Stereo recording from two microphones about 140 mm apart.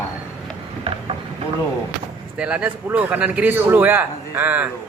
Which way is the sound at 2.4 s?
10° right (ahead or behind).